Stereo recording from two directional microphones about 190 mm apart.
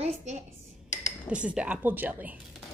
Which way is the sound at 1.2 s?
5° right (ahead or behind).